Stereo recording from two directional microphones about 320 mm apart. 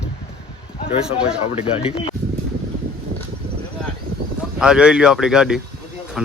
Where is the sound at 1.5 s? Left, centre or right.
Centre.